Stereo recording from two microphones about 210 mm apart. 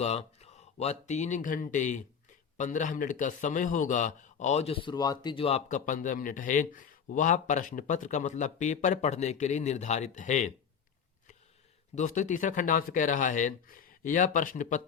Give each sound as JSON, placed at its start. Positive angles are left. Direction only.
{"t": 0.0, "sound": "a man's voice", "side_deg": 30}
{"t": 11.9, "sound": "a man's voice", "side_deg": 35}